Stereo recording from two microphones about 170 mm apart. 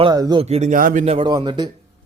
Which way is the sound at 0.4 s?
40° right (ahead or behind).